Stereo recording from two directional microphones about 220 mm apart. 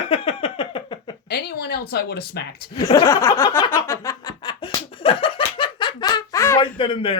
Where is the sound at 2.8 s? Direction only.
15° left (ahead or behind).